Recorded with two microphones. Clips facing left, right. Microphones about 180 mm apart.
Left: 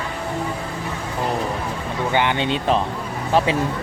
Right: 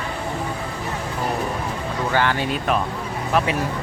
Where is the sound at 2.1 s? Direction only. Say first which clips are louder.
Left 1 dB; 20° left (ahead or behind).